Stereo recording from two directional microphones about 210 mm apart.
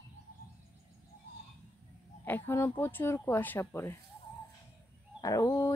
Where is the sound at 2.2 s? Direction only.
10° left (ahead or behind).